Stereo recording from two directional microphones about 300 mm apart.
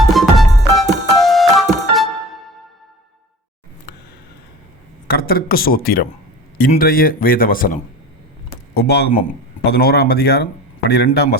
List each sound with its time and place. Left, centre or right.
0.1 s music: centre
5.0 s speech: left